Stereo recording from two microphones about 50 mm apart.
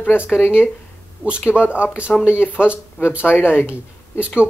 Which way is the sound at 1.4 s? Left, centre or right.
Left.